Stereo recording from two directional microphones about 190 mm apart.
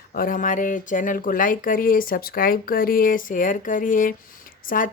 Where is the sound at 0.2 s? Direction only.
45° left (ahead or behind).